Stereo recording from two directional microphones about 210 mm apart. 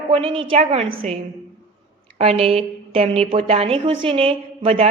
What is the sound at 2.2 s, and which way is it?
A woman's voice, 30° right (ahead or behind).